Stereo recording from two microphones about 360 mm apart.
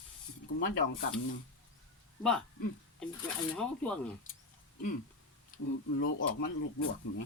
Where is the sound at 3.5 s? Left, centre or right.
Centre.